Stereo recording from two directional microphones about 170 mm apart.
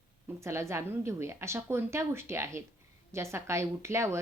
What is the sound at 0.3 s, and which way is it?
Speech, 15° right (ahead or behind).